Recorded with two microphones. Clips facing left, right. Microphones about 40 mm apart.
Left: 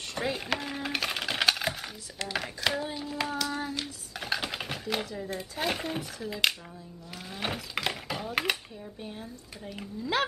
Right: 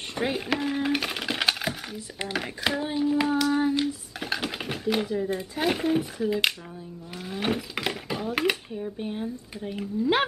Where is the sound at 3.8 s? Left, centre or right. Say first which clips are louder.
Right 8 dB; centre.